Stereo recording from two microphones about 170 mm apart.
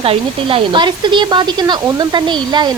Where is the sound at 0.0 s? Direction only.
35° right (ahead or behind).